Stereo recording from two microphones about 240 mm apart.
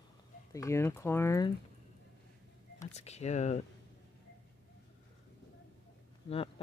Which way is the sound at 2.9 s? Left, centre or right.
Left.